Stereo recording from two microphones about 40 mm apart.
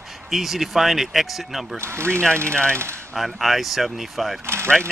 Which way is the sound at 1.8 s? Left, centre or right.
Right.